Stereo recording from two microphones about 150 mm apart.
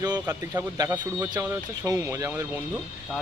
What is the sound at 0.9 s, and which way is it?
Speech, 10° right (ahead or behind).